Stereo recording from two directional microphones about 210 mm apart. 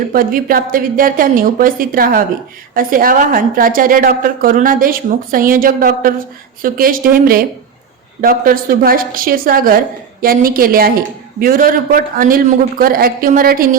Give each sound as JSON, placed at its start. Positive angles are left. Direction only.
{"t": 0.1, "sound": "a woman's voice", "side_deg": -40}